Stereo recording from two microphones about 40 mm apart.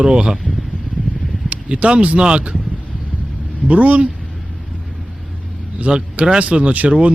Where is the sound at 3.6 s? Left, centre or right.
Right.